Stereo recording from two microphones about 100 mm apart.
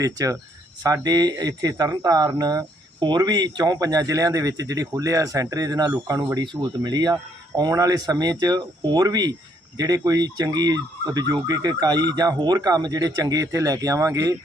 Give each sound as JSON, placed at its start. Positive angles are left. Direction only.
{"t": 0.0, "sound": "speech", "side_deg": -35}